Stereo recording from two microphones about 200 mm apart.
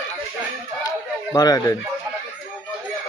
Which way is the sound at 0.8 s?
20° left (ahead or behind).